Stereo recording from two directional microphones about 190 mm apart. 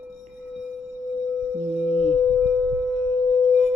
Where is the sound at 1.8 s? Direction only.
5° left (ahead or behind).